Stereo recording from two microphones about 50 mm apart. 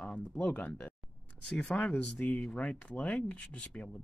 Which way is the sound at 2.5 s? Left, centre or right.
Left.